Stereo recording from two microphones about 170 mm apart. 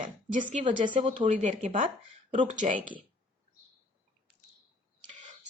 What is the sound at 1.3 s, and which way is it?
A woman's voice, 40° right (ahead or behind).